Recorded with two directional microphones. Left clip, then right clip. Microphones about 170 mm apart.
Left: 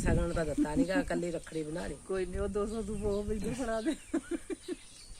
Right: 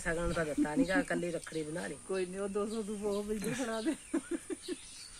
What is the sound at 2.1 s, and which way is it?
Speech, 10° left (ahead or behind).